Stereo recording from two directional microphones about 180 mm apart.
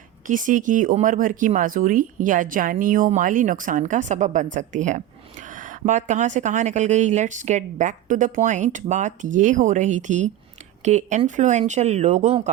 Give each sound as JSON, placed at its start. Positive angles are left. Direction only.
{"t": 0.3, "sound": "speech", "side_deg": -45}